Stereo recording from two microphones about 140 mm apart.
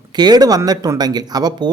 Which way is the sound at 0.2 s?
30° right (ahead or behind).